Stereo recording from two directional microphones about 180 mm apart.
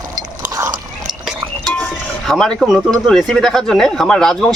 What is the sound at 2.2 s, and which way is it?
Speech, centre (ahead or behind).